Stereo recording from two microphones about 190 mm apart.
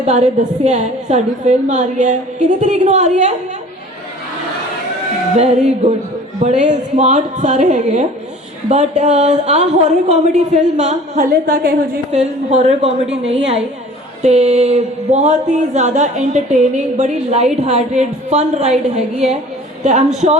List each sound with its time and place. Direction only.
0.0 s speech: 35° right (ahead or behind)
5.4 s a woman's voice: 35° right (ahead or behind); by 11.8 s 55° right (ahead or behind)
12.1 s a woman's voice: 35° right (ahead or behind)